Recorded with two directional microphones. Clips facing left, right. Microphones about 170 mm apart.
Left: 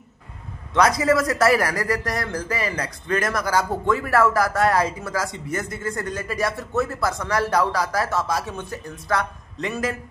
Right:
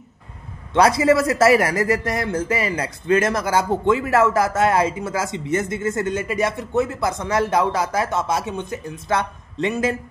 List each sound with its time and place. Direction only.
0.7 s a man's voice: 30° right (ahead or behind)